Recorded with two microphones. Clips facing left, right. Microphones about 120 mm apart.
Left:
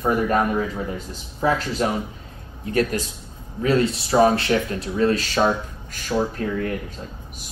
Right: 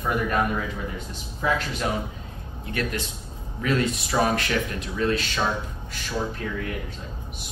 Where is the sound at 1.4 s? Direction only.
35° left (ahead or behind).